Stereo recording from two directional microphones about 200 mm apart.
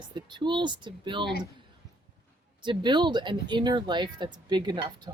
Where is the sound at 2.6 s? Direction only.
25° right (ahead or behind).